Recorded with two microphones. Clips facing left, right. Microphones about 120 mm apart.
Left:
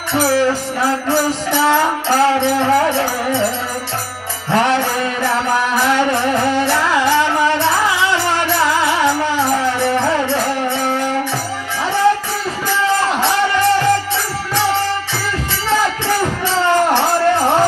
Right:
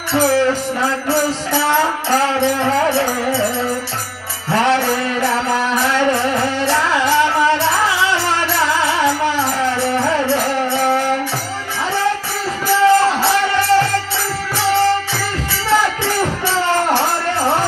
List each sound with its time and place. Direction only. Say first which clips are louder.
0.3 s music: even; 15° left (ahead or behind)
4.5 s music: even; 15° left (ahead or behind)
5.9 s music: even; 15° left (ahead or behind)
12.6 s music: right 5 dB; 15° left (ahead or behind)
15.7 s music: even; 15° left (ahead or behind)